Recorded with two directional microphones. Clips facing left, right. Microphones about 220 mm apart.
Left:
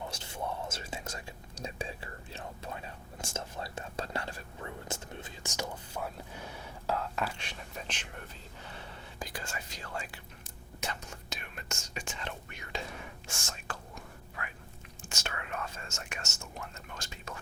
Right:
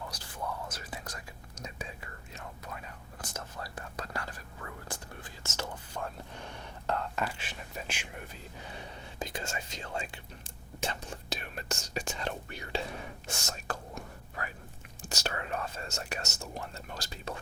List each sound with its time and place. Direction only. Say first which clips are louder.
0.1 s whispering: left 1 dB; 25° left (ahead or behind); by 13.7 s 40° right (ahead or behind)
14.4 s a sound: right 4 dB; 35° right (ahead or behind)
15.0 s whispering: right 5 dB; 35° right (ahead or behind)